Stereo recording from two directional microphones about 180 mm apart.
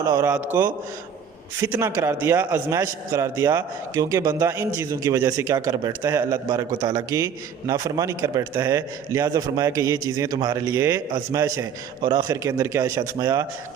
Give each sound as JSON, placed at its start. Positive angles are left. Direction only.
{"t": 0.0, "sound": "a man's voice", "side_deg": -20}